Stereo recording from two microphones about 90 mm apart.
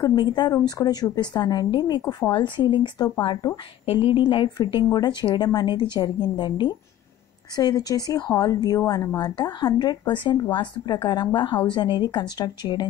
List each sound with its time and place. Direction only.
0.3 s a woman's voice: 50° left (ahead or behind)
2.3 s a woman's voice: 60° left (ahead or behind)
7.5 s a woman's voice: 45° left (ahead or behind)